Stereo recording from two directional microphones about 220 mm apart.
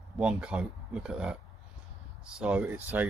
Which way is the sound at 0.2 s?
5° right (ahead or behind).